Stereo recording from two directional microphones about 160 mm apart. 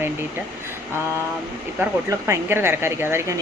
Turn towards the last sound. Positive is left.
turn(degrees=-15)  # may be behind; listen again after turning